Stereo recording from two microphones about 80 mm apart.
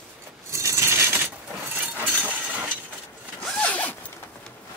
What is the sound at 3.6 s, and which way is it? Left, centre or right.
Zipper, centre.